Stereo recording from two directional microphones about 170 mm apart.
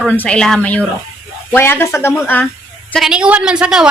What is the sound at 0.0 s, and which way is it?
Speech, 10° left (ahead or behind).